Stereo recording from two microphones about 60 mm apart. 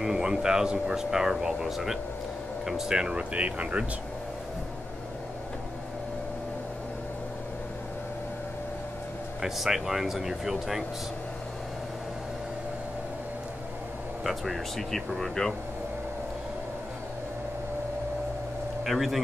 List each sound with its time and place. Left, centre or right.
0.0 s speech: centre
9.4 s speech: centre
14.2 s speech: centre
18.9 s speech: centre